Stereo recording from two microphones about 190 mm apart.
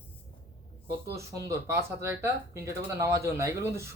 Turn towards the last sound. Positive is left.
turn(degrees=-15)  # may be behind; listen again after turning